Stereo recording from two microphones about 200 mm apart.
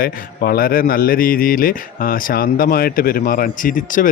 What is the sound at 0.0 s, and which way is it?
Speech, 50° left (ahead or behind).